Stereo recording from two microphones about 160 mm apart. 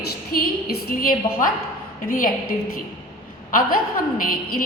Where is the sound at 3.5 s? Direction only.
60° left (ahead or behind).